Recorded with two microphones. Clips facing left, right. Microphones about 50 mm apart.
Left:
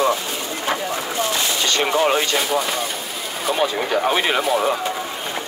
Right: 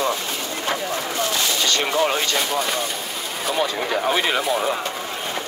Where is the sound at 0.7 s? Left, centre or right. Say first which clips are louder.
Left 2 dB; centre.